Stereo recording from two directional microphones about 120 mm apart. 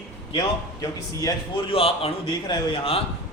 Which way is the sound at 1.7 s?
55° left (ahead or behind).